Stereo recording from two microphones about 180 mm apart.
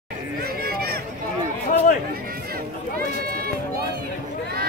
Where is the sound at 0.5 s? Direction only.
55° right (ahead or behind).